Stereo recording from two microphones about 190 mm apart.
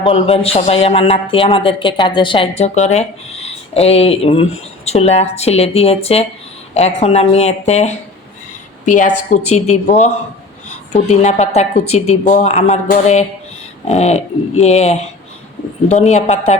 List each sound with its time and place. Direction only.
0.0 s a man's voice: 30° left (ahead or behind)
8.9 s a man's voice: 40° left (ahead or behind)